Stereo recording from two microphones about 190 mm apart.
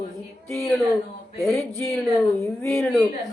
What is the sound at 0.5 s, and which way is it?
Speech, centre (ahead or behind).